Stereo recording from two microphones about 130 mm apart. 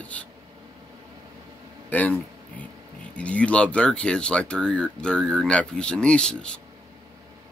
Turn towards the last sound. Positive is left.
turn(degrees=5)  # may be behind; listen again after turning